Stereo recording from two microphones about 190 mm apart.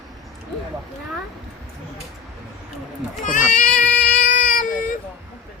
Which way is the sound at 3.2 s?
45° left (ahead or behind).